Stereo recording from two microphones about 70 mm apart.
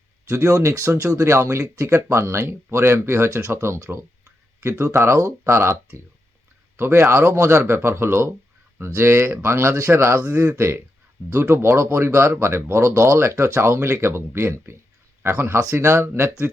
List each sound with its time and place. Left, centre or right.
0.3 s speech: right
6.7 s speech: right
10.2 s speech: centre
10.4 s speech: right